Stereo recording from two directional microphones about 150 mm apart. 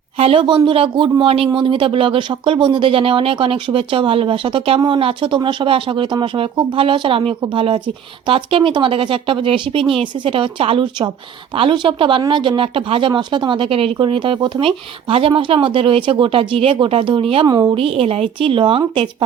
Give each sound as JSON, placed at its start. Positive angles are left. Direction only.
{"t": 0.2, "sound": "speech", "side_deg": -40}